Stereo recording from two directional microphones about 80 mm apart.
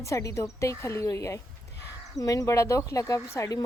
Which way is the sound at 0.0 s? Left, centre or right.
Left.